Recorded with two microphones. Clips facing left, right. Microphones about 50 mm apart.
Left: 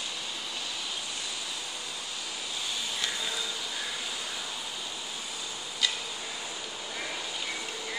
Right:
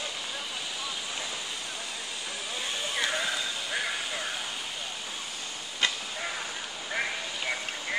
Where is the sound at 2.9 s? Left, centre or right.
Right.